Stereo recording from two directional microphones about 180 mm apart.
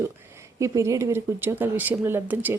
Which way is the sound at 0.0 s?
15° right (ahead or behind).